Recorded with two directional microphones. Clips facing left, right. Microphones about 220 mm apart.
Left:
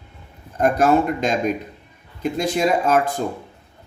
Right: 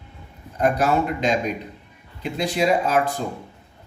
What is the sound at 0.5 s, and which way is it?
Speech, 45° left (ahead or behind).